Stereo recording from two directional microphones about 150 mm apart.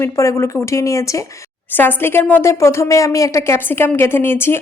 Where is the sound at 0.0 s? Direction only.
20° left (ahead or behind).